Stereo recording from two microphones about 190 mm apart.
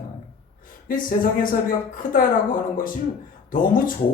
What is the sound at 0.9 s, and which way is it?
Speech, 45° left (ahead or behind).